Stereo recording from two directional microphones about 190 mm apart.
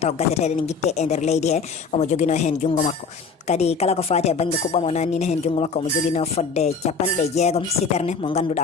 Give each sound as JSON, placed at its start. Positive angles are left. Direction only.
{"t": 0.0, "sound": "speech", "side_deg": 35}